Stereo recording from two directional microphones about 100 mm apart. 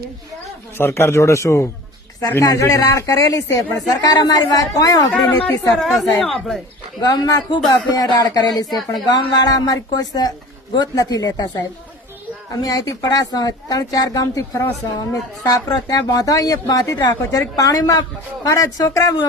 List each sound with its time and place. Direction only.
0.8 s a man's voice: 25° left (ahead or behind)
5.4 s a woman's voice: 15° left (ahead or behind)
6.1 s speech: 5° left (ahead or behind)
7.0 s a man's voice: 45° left (ahead or behind)